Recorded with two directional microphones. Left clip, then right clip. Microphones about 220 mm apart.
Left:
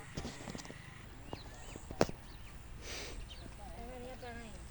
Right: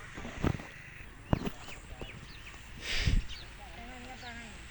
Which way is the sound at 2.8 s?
Centre (ahead or behind).